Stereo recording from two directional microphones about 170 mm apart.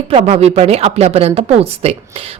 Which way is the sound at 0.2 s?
40° right (ahead or behind).